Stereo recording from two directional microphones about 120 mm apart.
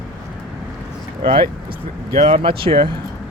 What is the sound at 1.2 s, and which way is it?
Speech, 45° right (ahead or behind).